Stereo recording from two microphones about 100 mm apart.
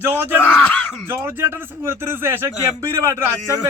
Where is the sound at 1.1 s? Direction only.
25° right (ahead or behind).